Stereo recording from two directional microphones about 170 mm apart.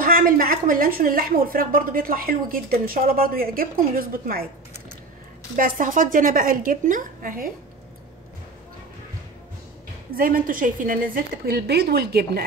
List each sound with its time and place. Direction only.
0.0 s a woman's voice: 60° right (ahead or behind)
5.6 s a woman's voice: 55° right (ahead or behind)
10.1 s a woman's voice: 55° right (ahead or behind)